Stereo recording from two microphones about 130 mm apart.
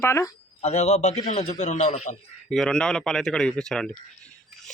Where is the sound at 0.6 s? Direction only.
55° left (ahead or behind).